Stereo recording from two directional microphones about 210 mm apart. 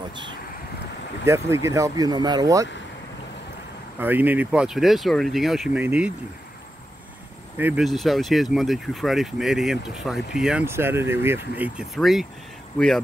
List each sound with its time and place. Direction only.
0.1 s vehicle: 20° right (ahead or behind)
1.2 s speech: 15° right (ahead or behind)
4.0 s speech: 10° right (ahead or behind)
7.5 s speech: 5° right (ahead or behind)